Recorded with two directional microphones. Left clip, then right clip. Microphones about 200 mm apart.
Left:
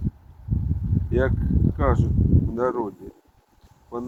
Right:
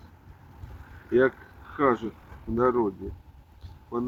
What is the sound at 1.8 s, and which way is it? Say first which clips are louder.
Speech: right 2 dB; 15° left (ahead or behind).